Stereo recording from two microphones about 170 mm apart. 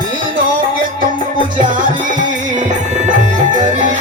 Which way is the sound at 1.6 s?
50° right (ahead or behind).